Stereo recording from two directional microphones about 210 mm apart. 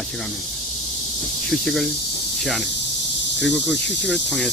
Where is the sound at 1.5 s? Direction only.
Centre (ahead or behind).